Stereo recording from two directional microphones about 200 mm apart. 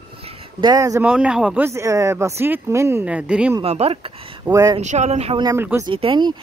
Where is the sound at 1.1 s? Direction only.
5° right (ahead or behind).